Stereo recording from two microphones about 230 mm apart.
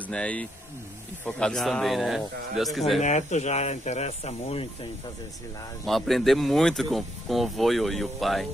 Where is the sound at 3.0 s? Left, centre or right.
Left.